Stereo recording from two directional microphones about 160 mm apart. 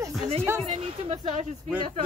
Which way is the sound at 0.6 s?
40° right (ahead or behind).